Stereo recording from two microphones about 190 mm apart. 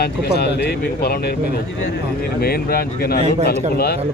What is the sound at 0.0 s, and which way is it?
Speech, 55° left (ahead or behind).